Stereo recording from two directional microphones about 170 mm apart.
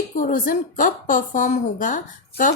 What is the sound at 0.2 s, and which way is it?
A woman's voice, 50° left (ahead or behind).